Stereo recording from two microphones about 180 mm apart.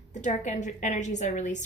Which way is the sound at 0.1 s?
40° left (ahead or behind).